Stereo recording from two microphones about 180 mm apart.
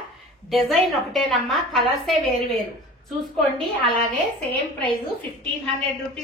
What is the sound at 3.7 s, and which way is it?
Speech, 60° left (ahead or behind).